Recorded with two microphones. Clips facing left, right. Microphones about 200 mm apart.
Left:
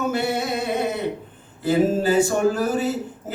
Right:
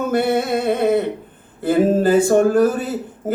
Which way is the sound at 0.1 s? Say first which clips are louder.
Right 6 dB; 55° right (ahead or behind).